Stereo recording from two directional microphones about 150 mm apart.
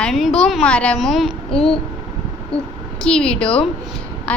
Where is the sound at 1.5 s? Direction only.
40° left (ahead or behind).